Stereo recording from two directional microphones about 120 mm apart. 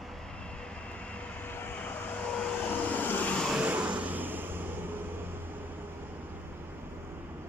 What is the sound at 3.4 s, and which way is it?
Vehicle, 10° right (ahead or behind).